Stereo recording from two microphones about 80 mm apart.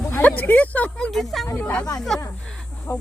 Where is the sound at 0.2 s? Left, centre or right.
Left.